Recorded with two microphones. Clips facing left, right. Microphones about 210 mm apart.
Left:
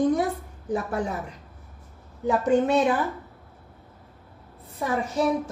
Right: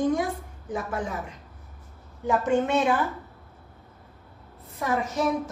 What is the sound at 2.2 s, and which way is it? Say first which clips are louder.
Speech: left 2 dB; 35° left (ahead or behind).